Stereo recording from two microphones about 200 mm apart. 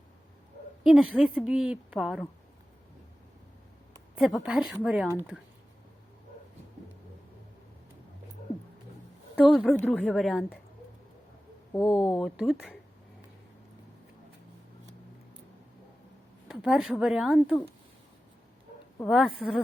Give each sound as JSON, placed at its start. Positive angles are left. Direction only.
{"t": 0.9, "sound": "a woman's voice", "side_deg": 0}
{"t": 4.1, "sound": "a woman's voice", "side_deg": 0}
{"t": 9.4, "sound": "a woman's voice", "side_deg": 0}
{"t": 11.7, "sound": "speech", "side_deg": 15}
{"t": 12.2, "sound": "a woman's voice", "side_deg": -5}
{"t": 16.5, "sound": "a woman's voice", "side_deg": -5}
{"t": 19.0, "sound": "a woman's voice", "side_deg": 0}